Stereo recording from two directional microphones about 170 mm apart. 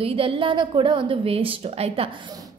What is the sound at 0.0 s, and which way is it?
A woman's voice, 30° right (ahead or behind).